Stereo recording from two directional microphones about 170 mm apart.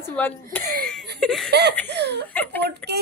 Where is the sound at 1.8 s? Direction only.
90° right.